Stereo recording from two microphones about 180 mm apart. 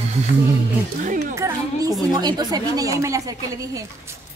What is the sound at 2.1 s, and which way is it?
Speech, 25° right (ahead or behind).